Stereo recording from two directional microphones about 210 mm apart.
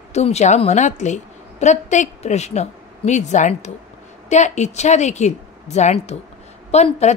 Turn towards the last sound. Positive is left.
turn(degrees=30)  # may be behind; listen again after turning